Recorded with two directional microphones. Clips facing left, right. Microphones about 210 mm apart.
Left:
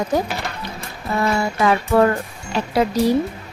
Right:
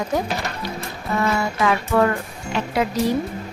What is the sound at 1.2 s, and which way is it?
Speech, 35° left (ahead or behind).